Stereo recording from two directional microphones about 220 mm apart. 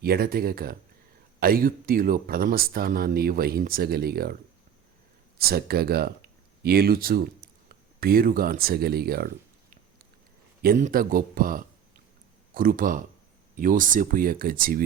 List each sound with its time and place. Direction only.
0.0 s speech: 45° right (ahead or behind)
5.4 s speech: 45° right (ahead or behind)
10.6 s speech: 40° right (ahead or behind)